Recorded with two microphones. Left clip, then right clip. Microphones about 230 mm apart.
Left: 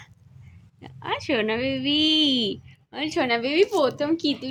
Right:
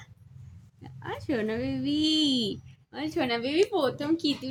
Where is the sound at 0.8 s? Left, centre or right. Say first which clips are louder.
Left 9 dB; right.